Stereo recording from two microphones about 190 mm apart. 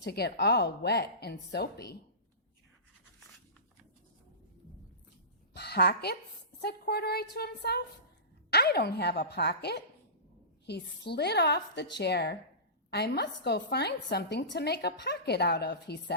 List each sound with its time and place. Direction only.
0.0 s a woman's voice: 60° left (ahead or behind)
5.5 s a woman's voice: 60° left (ahead or behind)